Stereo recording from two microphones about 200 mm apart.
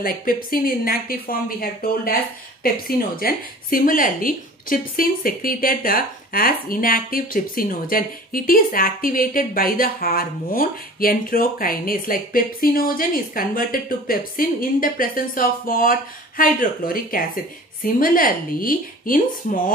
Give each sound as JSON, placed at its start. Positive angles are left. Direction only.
{"t": 0.0, "sound": "speech", "side_deg": 45}